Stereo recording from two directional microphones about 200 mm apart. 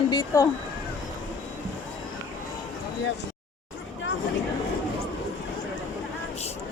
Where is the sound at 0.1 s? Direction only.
20° left (ahead or behind).